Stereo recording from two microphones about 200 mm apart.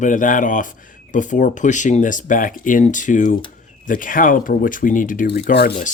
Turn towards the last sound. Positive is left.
turn(degrees=45)  # may be behind; listen again after turning